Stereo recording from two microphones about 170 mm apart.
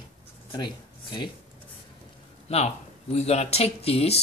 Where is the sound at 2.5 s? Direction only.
40° left (ahead or behind).